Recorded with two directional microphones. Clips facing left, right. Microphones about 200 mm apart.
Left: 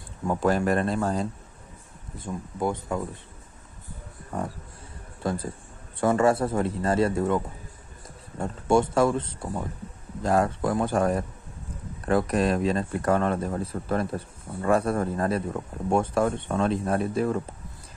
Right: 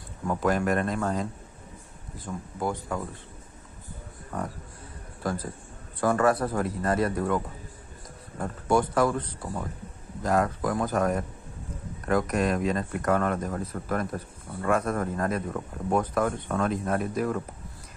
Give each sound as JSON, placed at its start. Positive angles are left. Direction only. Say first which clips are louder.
{"t": 0.3, "sound": "speech", "louder": "left 2 dB", "side_deg": 30}
{"t": 5.2, "sound": "speech", "louder": "left 2 dB", "side_deg": 25}
{"t": 8.4, "sound": "speech", "louder": "left 2 dB", "side_deg": 25}